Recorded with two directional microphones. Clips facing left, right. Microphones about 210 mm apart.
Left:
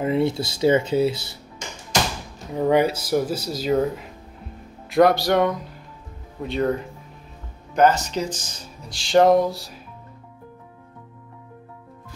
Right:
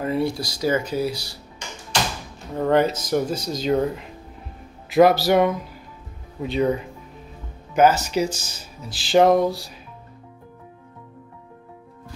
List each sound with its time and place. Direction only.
0.0 s speech: 20° left (ahead or behind)
2.6 s speech: 10° left (ahead or behind)